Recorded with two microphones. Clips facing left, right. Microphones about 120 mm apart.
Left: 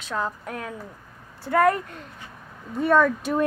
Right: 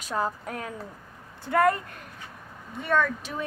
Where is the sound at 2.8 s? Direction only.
45° left (ahead or behind).